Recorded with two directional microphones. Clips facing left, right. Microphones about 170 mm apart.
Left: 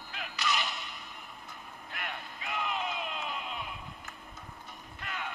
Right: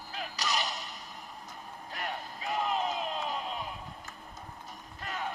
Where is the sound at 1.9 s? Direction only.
35° right (ahead or behind).